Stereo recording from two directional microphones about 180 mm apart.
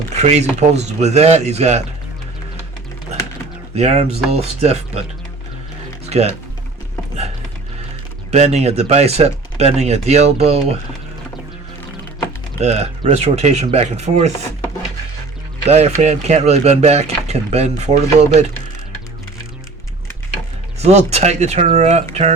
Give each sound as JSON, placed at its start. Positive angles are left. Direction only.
{"t": 0.1, "sound": "speech", "side_deg": -40}
{"t": 3.8, "sound": "speech", "side_deg": -35}
{"t": 6.1, "sound": "speech", "side_deg": -35}
{"t": 8.3, "sound": "speech", "side_deg": -40}
{"t": 12.5, "sound": "speech", "side_deg": -40}
{"t": 15.6, "sound": "speech", "side_deg": -35}
{"t": 20.8, "sound": "speech", "side_deg": -35}